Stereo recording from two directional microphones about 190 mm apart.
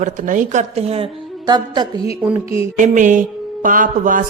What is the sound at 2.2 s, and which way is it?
Music, 10° right (ahead or behind).